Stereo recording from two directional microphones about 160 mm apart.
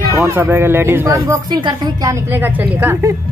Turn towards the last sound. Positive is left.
turn(degrees=-15)  # may be behind; listen again after turning